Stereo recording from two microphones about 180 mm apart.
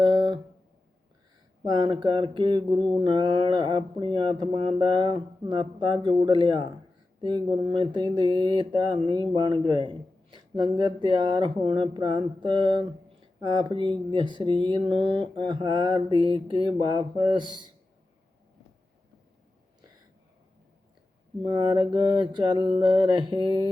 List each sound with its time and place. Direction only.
0.0 s a sound: 25° right (ahead or behind)
1.6 s speech: 25° right (ahead or behind)
21.4 s speech: 25° right (ahead or behind)